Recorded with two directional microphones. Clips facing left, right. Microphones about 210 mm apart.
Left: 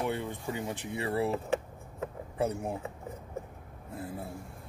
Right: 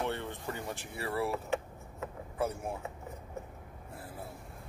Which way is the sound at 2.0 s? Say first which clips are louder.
Left 3 dB; 25° left (ahead or behind).